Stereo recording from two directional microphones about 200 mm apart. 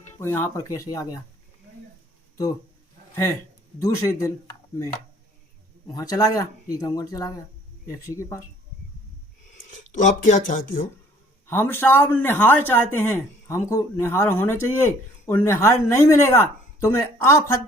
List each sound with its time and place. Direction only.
0.1 s a man's voice: 10° left (ahead or behind)
3.8 s a man's voice: 15° left (ahead or behind)
5.9 s a man's voice: 20° left (ahead or behind)
9.6 s speech: 40° left (ahead or behind)
11.4 s a man's voice: 10° left (ahead or behind)